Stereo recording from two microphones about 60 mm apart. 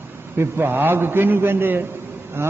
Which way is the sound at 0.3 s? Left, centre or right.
Right.